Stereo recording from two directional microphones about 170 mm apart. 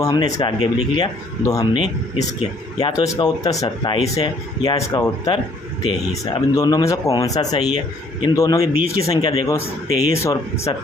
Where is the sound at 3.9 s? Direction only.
35° left (ahead or behind).